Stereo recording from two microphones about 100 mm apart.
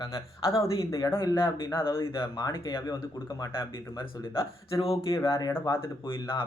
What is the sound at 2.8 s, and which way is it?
Speech, 40° left (ahead or behind).